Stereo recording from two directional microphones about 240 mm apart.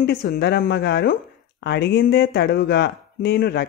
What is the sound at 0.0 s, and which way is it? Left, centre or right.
Speech, left.